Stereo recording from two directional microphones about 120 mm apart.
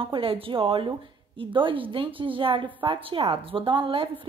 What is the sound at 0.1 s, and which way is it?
A woman's voice, 50° right (ahead or behind).